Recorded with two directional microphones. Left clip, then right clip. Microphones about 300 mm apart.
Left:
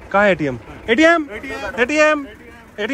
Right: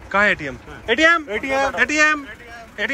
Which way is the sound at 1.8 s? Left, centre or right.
Centre.